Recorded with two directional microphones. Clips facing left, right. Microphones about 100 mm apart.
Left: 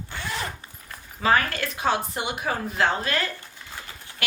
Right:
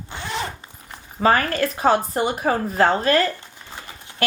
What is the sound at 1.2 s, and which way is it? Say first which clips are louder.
A woman's voice: right 4 dB; 40° right (ahead or behind).